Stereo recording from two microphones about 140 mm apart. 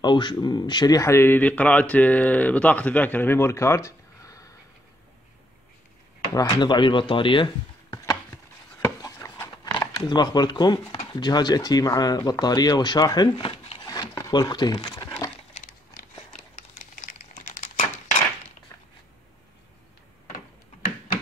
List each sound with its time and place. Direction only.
0.0 s speech: 35° left (ahead or behind)
6.3 s speech: 25° left (ahead or behind)
8.8 s chopping: 20° left (ahead or behind)
11.1 s speech: 30° left (ahead or behind)
13.8 s a sound: 25° left (ahead or behind)
15.5 s a sound: 50° left (ahead or behind)
16.3 s typing: 60° left (ahead or behind)